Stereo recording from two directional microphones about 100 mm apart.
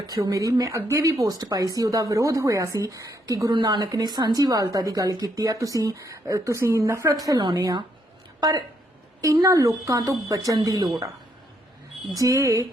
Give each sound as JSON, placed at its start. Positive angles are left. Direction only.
{"t": 0.1, "sound": "a woman's voice", "side_deg": -35}
{"t": 12.1, "sound": "speech", "side_deg": -30}